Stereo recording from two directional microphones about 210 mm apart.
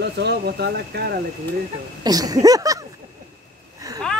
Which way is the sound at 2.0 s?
20° right (ahead or behind).